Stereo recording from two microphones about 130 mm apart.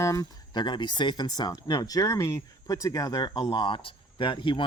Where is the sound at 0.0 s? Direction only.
25° left (ahead or behind).